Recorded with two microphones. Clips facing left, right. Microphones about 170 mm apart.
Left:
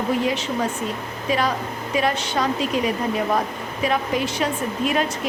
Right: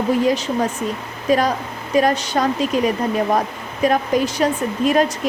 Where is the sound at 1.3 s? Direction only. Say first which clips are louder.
Right 5 dB; 45° right (ahead or behind).